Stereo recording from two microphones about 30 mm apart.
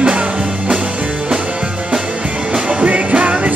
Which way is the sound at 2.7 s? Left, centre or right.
Right.